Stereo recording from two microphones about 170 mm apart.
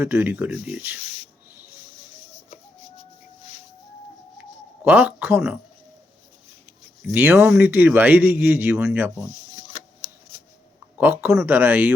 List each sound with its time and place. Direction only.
0.0 s speech: 10° right (ahead or behind)
1.0 s a sound: 40° left (ahead or behind)
4.9 s speech: 10° right (ahead or behind)
7.1 s speech: 10° right (ahead or behind)
9.1 s a sound: 20° left (ahead or behind)
10.9 s speech: 10° right (ahead or behind)